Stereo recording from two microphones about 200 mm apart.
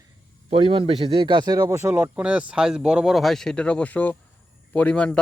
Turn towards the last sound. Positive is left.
turn(degrees=5)  # may be behind; listen again after turning